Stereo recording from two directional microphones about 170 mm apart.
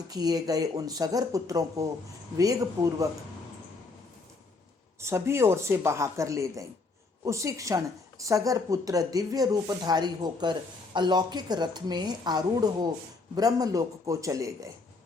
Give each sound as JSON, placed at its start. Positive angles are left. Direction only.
{"t": 0.1, "sound": "a woman's voice", "side_deg": -20}
{"t": 4.9, "sound": "a woman's voice", "side_deg": -15}